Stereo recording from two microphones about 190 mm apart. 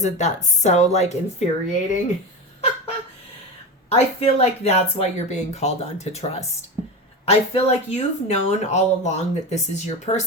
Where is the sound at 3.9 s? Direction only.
35° left (ahead or behind).